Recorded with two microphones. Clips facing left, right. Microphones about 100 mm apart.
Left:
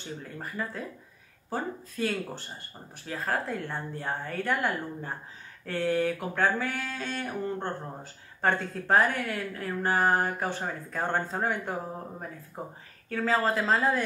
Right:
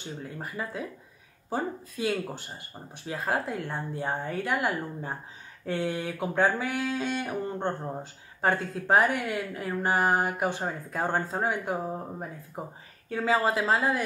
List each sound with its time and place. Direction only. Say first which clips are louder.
0.4 s speech: even; 10° right (ahead or behind)
13.1 s speech: right 1 dB; 10° right (ahead or behind)